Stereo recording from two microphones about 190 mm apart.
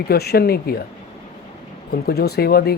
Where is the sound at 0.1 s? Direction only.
55° left (ahead or behind).